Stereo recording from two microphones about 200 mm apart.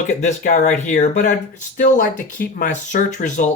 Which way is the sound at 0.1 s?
35° left (ahead or behind).